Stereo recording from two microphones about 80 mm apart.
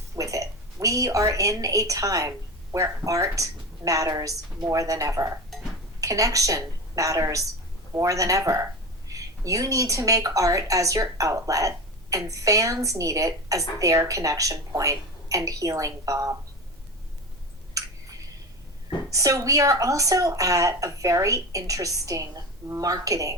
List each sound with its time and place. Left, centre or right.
0.2 s a woman's voice: right
19.1 s a woman's voice: right